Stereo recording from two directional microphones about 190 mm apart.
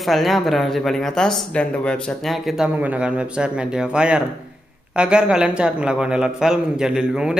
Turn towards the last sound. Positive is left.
turn(degrees=-5)  # may be behind; listen again after turning